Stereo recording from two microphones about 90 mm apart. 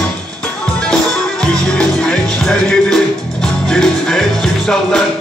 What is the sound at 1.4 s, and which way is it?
Music, 10° left (ahead or behind).